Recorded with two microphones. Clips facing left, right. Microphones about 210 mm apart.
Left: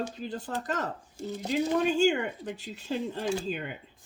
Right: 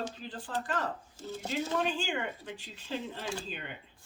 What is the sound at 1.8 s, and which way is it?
Speech, 45° left (ahead or behind).